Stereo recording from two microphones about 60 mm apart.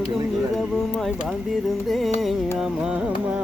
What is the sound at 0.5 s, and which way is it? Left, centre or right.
Speech, centre.